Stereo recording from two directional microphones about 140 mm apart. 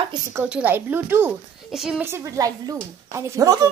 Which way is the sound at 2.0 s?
20° right (ahead or behind).